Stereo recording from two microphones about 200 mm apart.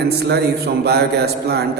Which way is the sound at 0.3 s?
55° right (ahead or behind).